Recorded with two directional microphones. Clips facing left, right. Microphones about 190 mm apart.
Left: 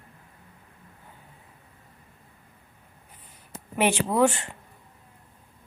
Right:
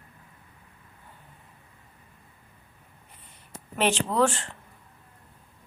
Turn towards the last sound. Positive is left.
turn(degrees=15)  # may be behind; listen again after turning